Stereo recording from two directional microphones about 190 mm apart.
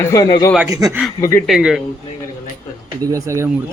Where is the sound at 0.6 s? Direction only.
15° right (ahead or behind).